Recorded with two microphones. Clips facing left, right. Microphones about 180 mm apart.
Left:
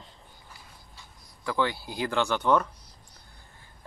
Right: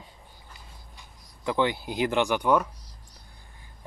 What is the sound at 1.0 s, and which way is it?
Speech, 20° right (ahead or behind).